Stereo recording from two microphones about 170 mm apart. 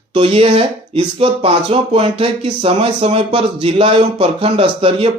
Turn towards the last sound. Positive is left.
turn(degrees=-35)  # may be behind; listen again after turning